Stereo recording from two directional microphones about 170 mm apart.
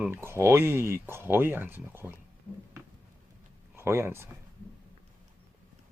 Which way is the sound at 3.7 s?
15° right (ahead or behind).